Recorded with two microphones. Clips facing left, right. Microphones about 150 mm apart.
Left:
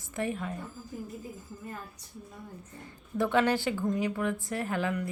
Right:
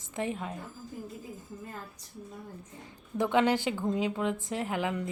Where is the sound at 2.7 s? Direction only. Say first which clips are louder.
Left 1 dB; 15° right (ahead or behind).